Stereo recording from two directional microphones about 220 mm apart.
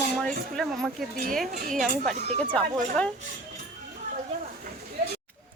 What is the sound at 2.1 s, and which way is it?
Speech, 30° right (ahead or behind).